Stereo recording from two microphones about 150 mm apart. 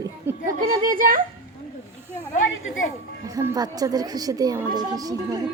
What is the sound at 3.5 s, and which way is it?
A woman's voice, 25° right (ahead or behind).